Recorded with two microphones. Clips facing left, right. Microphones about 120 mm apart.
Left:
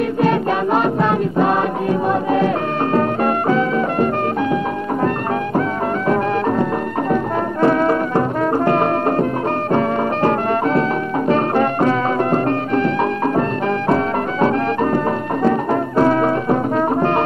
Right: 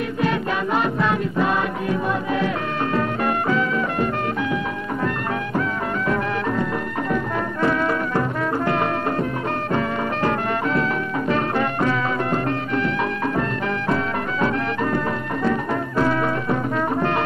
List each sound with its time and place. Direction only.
0.2 s music: 45° left (ahead or behind)
7.6 s music: 40° left (ahead or behind)